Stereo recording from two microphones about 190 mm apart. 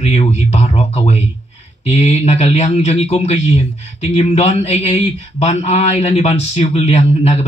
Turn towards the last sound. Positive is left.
turn(degrees=35)  # may be behind; listen again after turning